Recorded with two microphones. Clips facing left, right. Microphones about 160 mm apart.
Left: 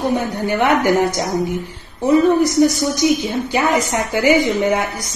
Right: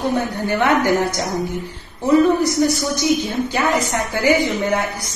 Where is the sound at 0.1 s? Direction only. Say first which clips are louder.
Left 1 dB; 15° left (ahead or behind).